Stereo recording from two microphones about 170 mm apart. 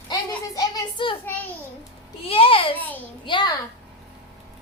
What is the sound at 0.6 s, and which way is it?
Speech, 25° left (ahead or behind).